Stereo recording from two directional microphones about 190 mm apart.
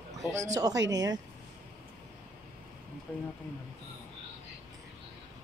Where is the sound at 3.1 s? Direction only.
5° left (ahead or behind).